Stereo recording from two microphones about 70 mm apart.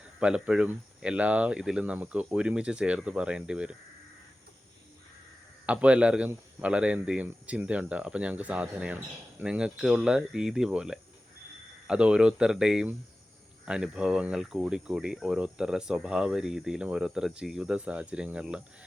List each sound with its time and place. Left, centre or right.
0.0 s speech: centre
5.6 s speech: centre